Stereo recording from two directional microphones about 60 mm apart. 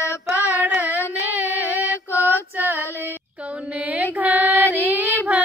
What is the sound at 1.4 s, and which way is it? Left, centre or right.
Mantra, right.